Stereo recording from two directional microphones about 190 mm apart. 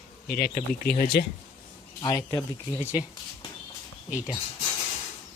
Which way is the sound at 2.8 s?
10° right (ahead or behind).